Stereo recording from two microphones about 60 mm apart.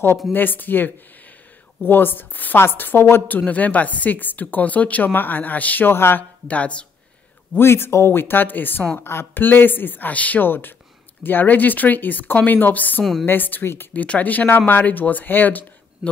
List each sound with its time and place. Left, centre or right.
0.3 s speech: left
3.3 s speech: left
5.9 s speech: left
6.4 s speech: left
7.5 s speech: left